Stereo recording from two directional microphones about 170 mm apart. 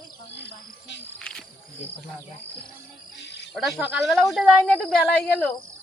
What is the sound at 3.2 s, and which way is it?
Cricket, 90° left.